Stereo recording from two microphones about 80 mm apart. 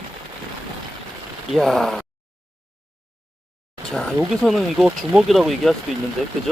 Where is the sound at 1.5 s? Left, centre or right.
Centre.